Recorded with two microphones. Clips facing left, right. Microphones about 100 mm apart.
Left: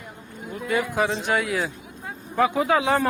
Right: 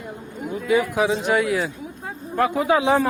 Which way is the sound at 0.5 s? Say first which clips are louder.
Right 4 dB; centre (ahead or behind).